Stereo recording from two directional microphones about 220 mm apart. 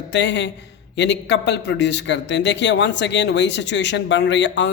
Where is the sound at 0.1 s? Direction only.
55° left (ahead or behind).